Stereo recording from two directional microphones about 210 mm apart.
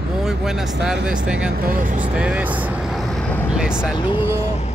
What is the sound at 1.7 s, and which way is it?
Speech, 40° right (ahead or behind).